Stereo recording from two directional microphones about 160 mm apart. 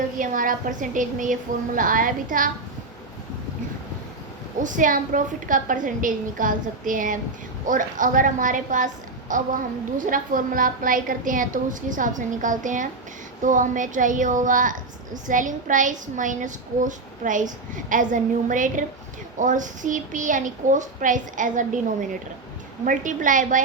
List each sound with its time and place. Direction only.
0.2 s a woman's voice: 55° right (ahead or behind)
4.6 s a woman's voice: 55° right (ahead or behind)
22.9 s a woman's voice: 55° right (ahead or behind)